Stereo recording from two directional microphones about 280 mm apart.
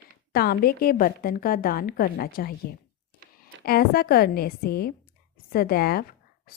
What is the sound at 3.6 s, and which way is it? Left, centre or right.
A woman's voice, left.